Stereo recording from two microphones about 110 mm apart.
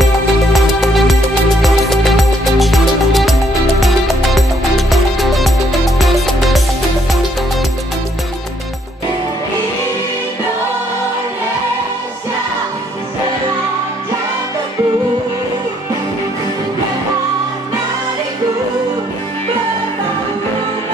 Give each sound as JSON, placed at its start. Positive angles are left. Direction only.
{"t": 0.0, "sound": "music", "side_deg": 0}